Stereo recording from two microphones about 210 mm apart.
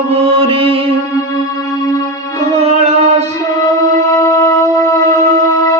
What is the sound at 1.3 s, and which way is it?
Music, 15° left (ahead or behind).